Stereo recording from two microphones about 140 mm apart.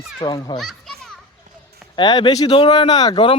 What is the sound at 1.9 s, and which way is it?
Speech, 35° left (ahead or behind).